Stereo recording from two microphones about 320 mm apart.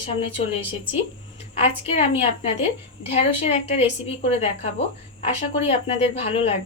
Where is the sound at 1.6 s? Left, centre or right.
Centre.